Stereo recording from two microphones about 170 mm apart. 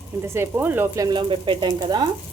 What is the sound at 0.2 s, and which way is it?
Speech, 15° right (ahead or behind).